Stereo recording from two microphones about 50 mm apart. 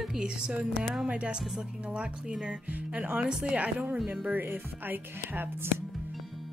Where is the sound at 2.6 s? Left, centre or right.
Right.